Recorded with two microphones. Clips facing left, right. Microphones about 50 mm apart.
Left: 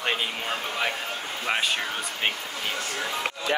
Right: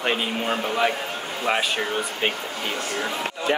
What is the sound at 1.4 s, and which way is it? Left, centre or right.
Speech, centre.